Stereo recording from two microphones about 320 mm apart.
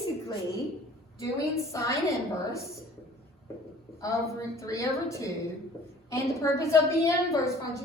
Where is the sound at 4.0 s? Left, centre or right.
Centre.